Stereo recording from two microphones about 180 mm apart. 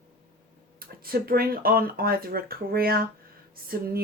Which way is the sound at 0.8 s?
55° right (ahead or behind).